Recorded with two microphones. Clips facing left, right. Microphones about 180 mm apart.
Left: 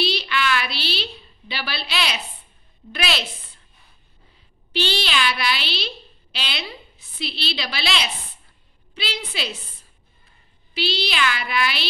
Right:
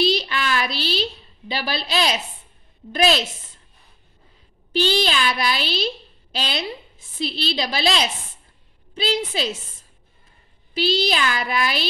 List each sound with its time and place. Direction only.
0.0 s a sound: 45° right (ahead or behind)
2.9 s a child's voice: 45° right (ahead or behind)
4.7 s a child's voice: 45° right (ahead or behind)